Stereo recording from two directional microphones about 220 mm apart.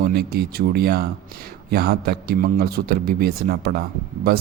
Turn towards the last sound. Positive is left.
turn(degrees=-45)  # may be behind; listen again after turning